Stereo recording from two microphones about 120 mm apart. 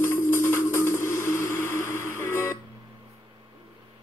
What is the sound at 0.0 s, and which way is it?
Music, 20° left (ahead or behind).